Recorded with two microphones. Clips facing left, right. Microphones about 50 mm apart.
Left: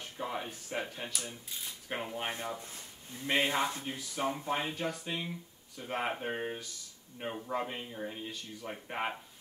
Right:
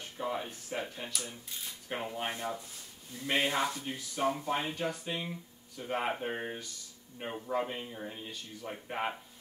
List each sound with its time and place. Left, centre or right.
0.0 s speech: centre
2.6 s a sound: left
3.2 s speech: centre
3.8 s speech: centre
4.3 s speech: centre
4.6 s speech: centre